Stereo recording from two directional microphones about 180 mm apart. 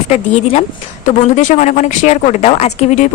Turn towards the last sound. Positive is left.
turn(degrees=40)  # may be behind; listen again after turning